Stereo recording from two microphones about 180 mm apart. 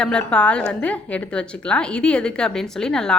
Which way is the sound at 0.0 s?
5° left (ahead or behind).